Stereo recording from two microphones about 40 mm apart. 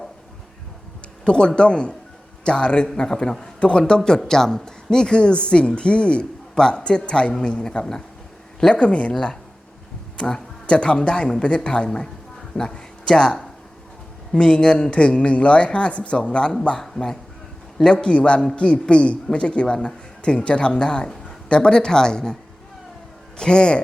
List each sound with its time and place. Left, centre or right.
1.2 s a woman's voice: left
8.7 s speech: left
9.1 s speech: centre
10.7 s a woman's voice: left
16.8 s speech: centre
17.9 s a woman's voice: left
23.4 s a woman's voice: left